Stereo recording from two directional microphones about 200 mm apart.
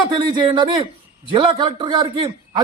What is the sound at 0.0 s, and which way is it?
A man's voice, 25° right (ahead or behind).